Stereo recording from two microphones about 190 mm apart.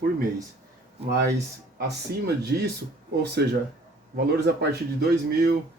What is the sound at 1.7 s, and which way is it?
Speech, 60° right (ahead or behind).